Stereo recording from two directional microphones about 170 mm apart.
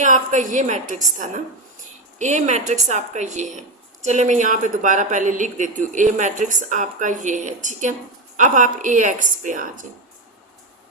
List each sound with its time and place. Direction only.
0.0 s speech: 45° right (ahead or behind)